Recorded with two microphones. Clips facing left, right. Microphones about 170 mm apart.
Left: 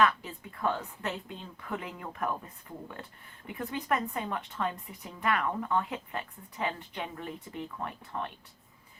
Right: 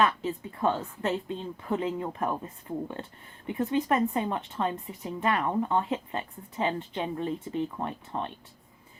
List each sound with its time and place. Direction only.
0.0 s speech: 25° right (ahead or behind)